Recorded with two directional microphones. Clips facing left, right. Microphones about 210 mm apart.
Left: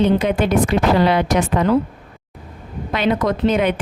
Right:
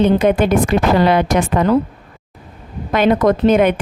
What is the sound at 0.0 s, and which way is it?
A woman's voice, 50° right (ahead or behind).